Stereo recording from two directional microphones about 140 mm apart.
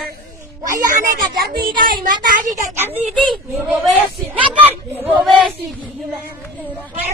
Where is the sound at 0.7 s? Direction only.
30° right (ahead or behind).